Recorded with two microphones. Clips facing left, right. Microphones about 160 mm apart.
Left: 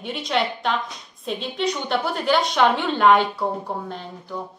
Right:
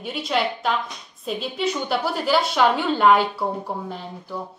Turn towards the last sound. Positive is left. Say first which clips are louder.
# even
turn(degrees=-5)  # may be behind; listen again after turning